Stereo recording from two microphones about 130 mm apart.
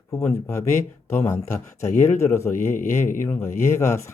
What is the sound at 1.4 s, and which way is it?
Speech, 65° left (ahead or behind).